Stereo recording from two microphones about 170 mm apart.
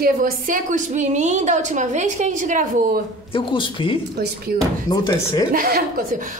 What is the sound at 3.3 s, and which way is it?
Speech, 30° left (ahead or behind).